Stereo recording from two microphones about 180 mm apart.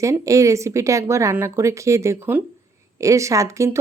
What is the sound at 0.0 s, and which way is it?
Speech, 15° right (ahead or behind).